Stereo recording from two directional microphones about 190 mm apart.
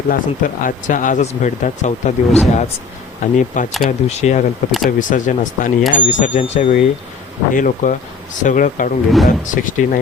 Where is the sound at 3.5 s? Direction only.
45° left (ahead or behind).